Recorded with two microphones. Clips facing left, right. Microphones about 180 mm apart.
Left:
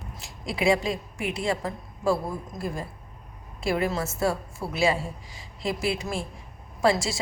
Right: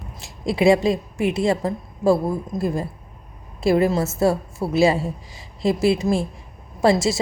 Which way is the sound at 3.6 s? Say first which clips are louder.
Right 8 dB; 30° right (ahead or behind).